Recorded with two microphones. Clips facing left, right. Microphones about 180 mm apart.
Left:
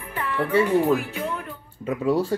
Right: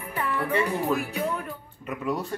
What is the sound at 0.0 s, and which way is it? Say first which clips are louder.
Music: left 2 dB; 10° right (ahead or behind).